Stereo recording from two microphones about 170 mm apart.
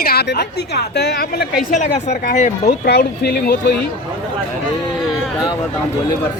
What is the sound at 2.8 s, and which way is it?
Speech, 70° left (ahead or behind).